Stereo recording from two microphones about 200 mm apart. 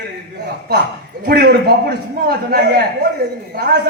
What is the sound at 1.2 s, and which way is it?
A man's voice, 50° right (ahead or behind).